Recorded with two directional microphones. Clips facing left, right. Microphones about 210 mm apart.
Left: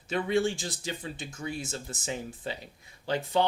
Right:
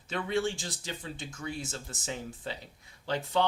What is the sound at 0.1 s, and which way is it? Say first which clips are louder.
Speech: left 4 dB; 15° left (ahead or behind).